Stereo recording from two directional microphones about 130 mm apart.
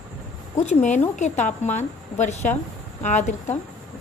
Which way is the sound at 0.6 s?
60° left (ahead or behind).